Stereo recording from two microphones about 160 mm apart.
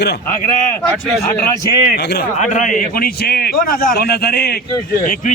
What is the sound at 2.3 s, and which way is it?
A man's voice, 50° left (ahead or behind).